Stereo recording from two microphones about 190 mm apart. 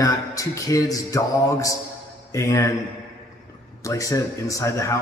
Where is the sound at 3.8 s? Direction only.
15° left (ahead or behind).